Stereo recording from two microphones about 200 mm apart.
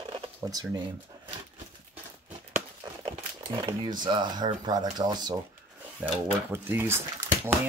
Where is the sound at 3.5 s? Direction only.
20° right (ahead or behind).